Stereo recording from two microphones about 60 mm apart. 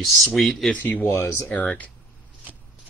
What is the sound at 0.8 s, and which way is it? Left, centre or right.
Speech, left.